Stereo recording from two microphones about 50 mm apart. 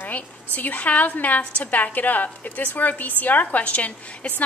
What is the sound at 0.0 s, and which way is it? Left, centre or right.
A woman's voice, left.